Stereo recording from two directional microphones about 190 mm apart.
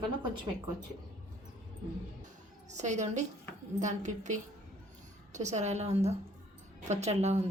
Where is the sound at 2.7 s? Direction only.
40° right (ahead or behind).